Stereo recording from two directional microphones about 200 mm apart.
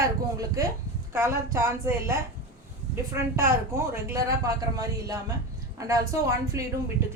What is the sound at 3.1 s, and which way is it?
A woman's voice, 15° right (ahead or behind).